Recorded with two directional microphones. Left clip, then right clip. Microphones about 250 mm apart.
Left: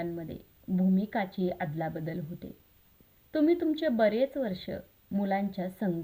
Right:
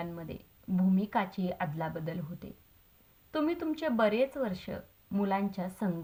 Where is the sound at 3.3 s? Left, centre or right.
Right.